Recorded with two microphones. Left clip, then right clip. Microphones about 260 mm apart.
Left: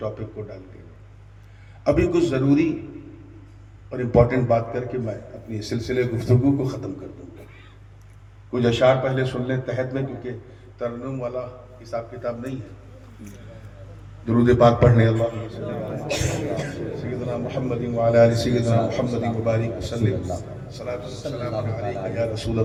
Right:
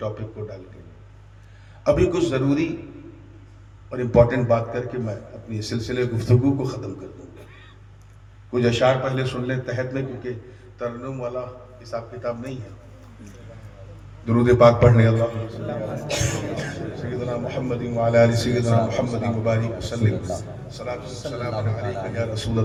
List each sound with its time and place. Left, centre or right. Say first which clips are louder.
1.8 s a man's voice: even; right
3.9 s a man's voice: right 1 dB; right
8.5 s a man's voice: left 1 dB; right
14.3 s a man's voice: right 2 dB; right
17.9 s a man's voice: left 1 dB; right
20.2 s a man's voice: right 1 dB; centre
20.7 s a man's voice: left 1 dB; right